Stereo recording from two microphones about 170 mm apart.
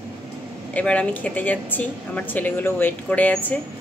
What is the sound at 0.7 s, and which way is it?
Speech, 5° left (ahead or behind).